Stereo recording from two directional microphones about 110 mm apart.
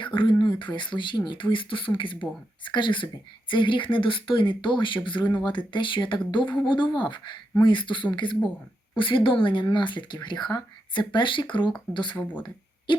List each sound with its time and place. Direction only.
0.0 s speech: 50° left (ahead or behind)
12.9 s owl: 45° left (ahead or behind)